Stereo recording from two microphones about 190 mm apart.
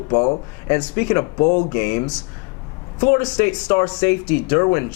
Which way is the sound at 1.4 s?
30° left (ahead or behind).